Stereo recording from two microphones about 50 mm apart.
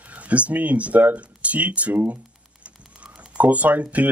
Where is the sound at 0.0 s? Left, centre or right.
Right.